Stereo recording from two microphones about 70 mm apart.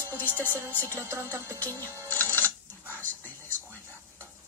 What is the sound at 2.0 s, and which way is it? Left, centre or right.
Music, left.